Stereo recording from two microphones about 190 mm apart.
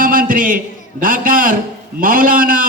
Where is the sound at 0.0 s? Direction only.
45° right (ahead or behind).